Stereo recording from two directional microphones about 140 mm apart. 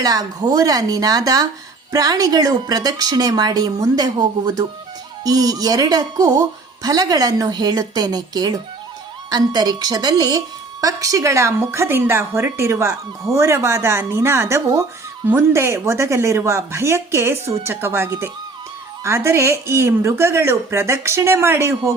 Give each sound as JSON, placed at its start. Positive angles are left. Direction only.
{"t": 0.0, "sound": "a woman's voice", "side_deg": -25}